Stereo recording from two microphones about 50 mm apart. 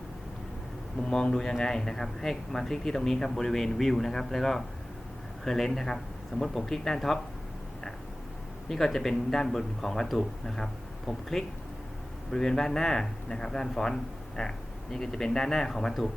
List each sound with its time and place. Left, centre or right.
1.0 s speech: centre
8.7 s speech: centre